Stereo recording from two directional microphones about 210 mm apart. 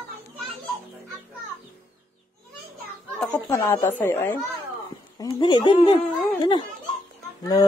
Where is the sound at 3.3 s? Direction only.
15° left (ahead or behind).